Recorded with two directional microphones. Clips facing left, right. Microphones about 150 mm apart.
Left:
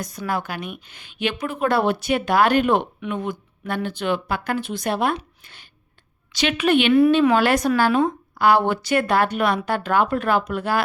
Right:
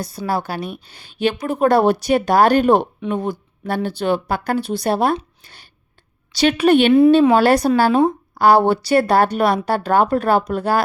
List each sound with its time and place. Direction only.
0.0 s a woman's voice: 30° right (ahead or behind)
5.1 s a sound: 35° right (ahead or behind)
6.3 s a woman's voice: 35° right (ahead or behind)